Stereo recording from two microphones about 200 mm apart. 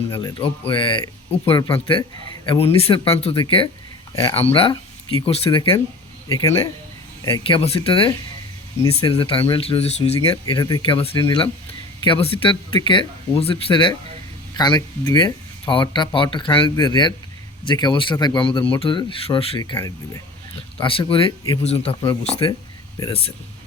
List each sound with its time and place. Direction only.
0.1 s speech: 15° left (ahead or behind)
4.1 s speech: 15° left (ahead or behind)
4.4 s speech: 30° left (ahead or behind)
10.2 s speech: 20° left (ahead or behind)
23.0 s speech: 15° left (ahead or behind)